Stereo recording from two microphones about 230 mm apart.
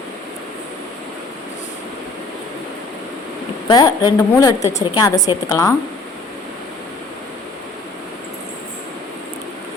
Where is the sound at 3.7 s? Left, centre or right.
Centre.